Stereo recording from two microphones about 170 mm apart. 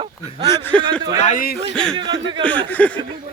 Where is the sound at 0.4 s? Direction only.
15° left (ahead or behind).